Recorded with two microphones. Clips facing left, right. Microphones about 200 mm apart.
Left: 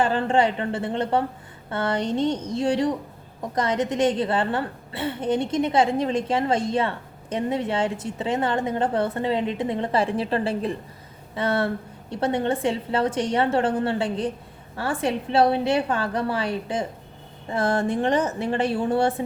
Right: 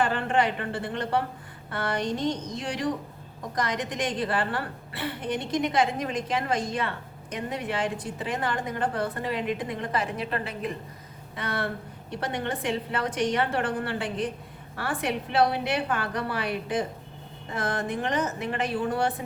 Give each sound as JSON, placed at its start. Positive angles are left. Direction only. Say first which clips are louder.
{"t": 0.0, "sound": "a woman's voice", "louder": "left 4 dB", "side_deg": 25}